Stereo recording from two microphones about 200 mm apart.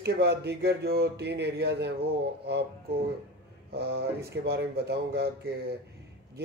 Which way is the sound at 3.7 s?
50° right (ahead or behind).